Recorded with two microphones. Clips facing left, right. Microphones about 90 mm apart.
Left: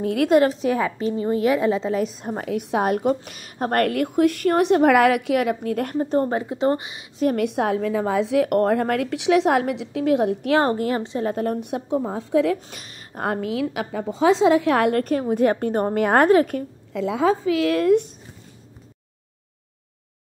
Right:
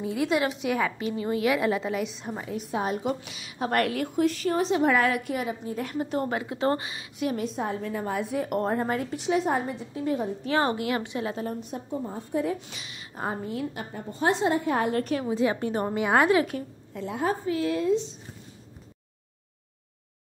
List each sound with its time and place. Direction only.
0.0 s a woman's voice: 60° left (ahead or behind)
0.4 s a woman's voice: 35° left (ahead or behind)
2.4 s a woman's voice: 70° left (ahead or behind)
3.1 s a woman's voice: 50° left (ahead or behind)
5.9 s a woman's voice: 35° left (ahead or behind)
7.3 s a woman's voice: 70° left (ahead or behind)
10.6 s a woman's voice: 40° left (ahead or behind)
11.0 s a woman's voice: 25° left (ahead or behind)
11.2 s a woman's voice: 55° left (ahead or behind); by 12.5 s 90° left
12.5 s a woman's voice: 45° left (ahead or behind)
13.2 s a woman's voice: 80° left; by 16.6 s 45° left (ahead or behind)
16.9 s a woman's voice: 90° left; by 18.1 s 65° left (ahead or behind)